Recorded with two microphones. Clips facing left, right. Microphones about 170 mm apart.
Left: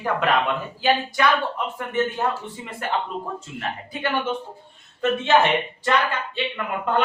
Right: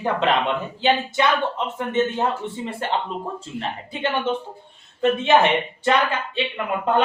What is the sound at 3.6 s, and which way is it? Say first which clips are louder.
Speech: right 3 dB; 25° right (ahead or behind).